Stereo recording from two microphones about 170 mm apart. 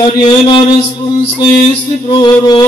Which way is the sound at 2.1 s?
25° left (ahead or behind).